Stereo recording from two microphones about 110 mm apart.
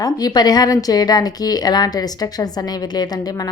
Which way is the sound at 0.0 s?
35° left (ahead or behind).